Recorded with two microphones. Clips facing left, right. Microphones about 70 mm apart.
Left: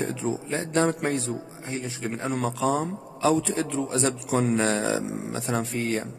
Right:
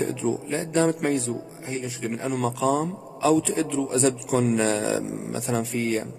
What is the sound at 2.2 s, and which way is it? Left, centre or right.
Speech, left.